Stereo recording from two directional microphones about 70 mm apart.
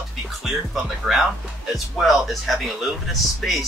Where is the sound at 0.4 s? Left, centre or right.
Centre.